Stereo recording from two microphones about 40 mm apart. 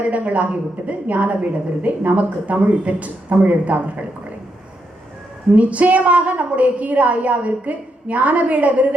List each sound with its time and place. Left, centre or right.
0.0 s a woman's voice: right
5.5 s a woman's voice: right